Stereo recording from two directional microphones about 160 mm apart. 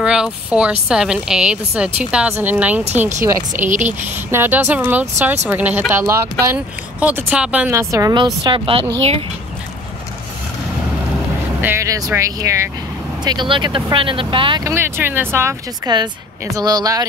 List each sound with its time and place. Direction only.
0.0 s a woman's voice: 5° right (ahead or behind)
3.6 s speech: 50° right (ahead or behind)
4.3 s speech: 10° right (ahead or behind)
7.9 s speech: 25° right (ahead or behind)
11.6 s speech: 15° right (ahead or behind); by 14.6 s 30° right (ahead or behind)
14.6 s speech: 15° right (ahead or behind)